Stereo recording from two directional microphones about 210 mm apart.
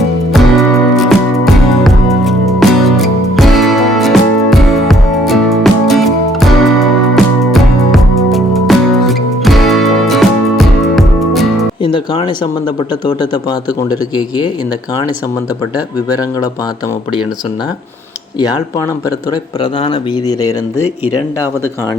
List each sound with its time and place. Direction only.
0.3 s music: centre (ahead or behind)
11.8 s music: 25° left (ahead or behind)
14.2 s speech: 20° left (ahead or behind)
18.3 s speech: 20° left (ahead or behind)
19.8 s speech: 20° left (ahead or behind)